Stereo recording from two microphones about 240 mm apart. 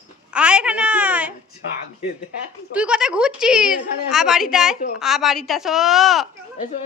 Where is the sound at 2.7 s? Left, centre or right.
Centre.